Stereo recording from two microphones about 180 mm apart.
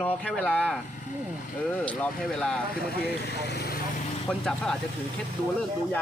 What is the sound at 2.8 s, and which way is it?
Speech, 65° left (ahead or behind).